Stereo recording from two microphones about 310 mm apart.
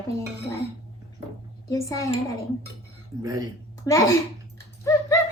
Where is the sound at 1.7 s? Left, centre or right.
Centre.